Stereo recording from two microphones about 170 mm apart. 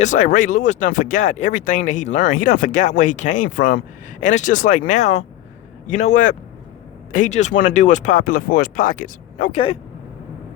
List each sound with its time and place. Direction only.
0.0 s speech: 45° left (ahead or behind)